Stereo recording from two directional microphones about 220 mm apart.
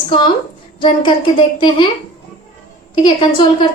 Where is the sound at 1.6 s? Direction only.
20° left (ahead or behind).